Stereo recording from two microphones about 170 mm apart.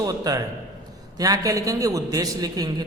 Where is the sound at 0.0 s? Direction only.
20° right (ahead or behind).